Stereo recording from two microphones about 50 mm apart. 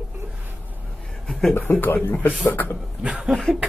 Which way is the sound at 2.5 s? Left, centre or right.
Left.